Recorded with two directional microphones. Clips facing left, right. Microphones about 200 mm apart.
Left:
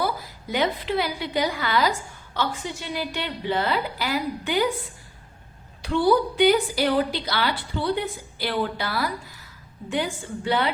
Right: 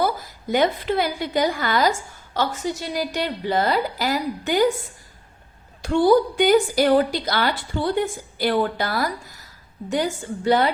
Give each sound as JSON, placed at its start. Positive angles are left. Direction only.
{"t": 0.0, "sound": "a woman's voice", "side_deg": -45}
{"t": 5.8, "sound": "a woman's voice", "side_deg": -45}